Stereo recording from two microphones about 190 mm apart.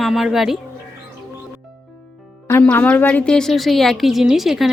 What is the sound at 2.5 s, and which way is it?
A woman's voice, 10° left (ahead or behind).